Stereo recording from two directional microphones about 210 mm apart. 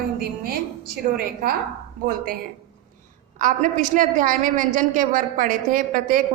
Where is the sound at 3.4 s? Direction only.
40° right (ahead or behind).